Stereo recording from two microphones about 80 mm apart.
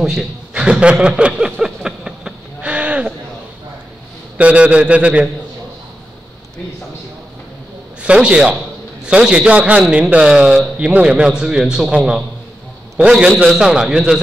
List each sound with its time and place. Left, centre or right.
0.0 s a sound: centre
4.4 s a man's voice: centre
8.0 s a man's voice: centre